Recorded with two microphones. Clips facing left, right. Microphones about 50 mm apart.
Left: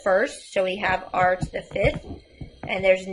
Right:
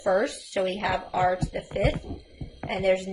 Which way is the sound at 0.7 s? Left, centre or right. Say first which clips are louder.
Left 3 dB; left.